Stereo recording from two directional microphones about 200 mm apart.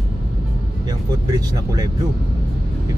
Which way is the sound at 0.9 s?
20° right (ahead or behind).